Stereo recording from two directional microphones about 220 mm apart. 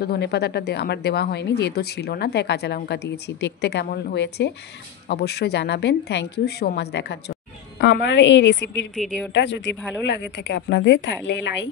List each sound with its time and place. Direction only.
0.0 s a woman's voice: 50° left (ahead or behind)
8.9 s a woman's voice: centre (ahead or behind)
9.3 s a woman's voice: 55° left (ahead or behind)
9.8 s a woman's voice: centre (ahead or behind)
10.0 s a woman's voice: 50° left (ahead or behind)